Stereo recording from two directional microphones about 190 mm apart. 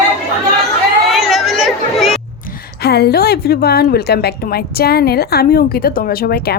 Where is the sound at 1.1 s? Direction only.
Centre (ahead or behind).